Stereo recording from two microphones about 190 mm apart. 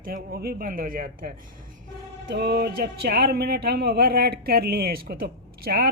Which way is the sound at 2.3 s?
60° right (ahead or behind).